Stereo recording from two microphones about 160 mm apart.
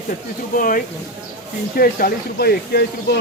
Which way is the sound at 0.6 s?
60° left (ahead or behind).